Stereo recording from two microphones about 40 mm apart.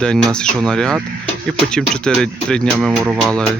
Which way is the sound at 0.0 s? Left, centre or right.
Centre.